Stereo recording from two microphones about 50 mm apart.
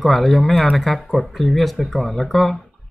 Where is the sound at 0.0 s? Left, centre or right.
Centre.